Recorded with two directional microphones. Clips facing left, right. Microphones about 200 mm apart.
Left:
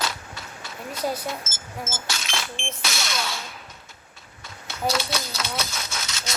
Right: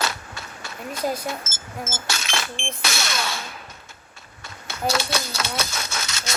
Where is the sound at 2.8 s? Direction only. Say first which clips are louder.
Right 2 dB; 70° right (ahead or behind).